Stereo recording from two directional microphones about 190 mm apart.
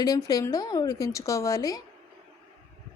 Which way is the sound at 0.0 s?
20° left (ahead or behind).